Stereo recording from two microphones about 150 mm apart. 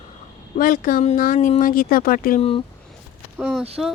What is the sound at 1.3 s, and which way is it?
Speech, 45° left (ahead or behind).